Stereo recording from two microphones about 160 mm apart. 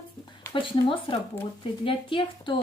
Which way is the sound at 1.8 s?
35° left (ahead or behind).